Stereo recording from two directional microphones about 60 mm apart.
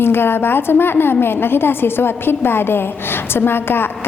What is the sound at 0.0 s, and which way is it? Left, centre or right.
A woman's voice, left.